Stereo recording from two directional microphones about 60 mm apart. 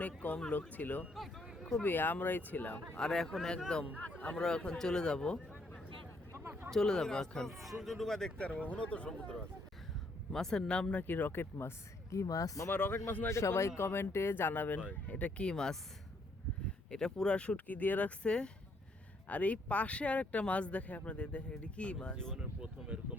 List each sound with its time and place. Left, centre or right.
0.0 s speech: left
1.1 s speech: centre
1.8 s speech: left
3.0 s speech: centre
4.0 s a sound: left
4.4 s a man's voice: centre
8.4 s speech: left
11.0 s speech: left
12.1 s speech: left
12.7 s speech: left
13.3 s speech: left; by 15.8 s centre
16.9 s speech: centre; by 18.1 s left
18.2 s speech: centre
22.4 s speech: centre